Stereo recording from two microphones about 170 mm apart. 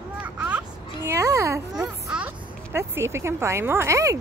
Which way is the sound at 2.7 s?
15° right (ahead or behind).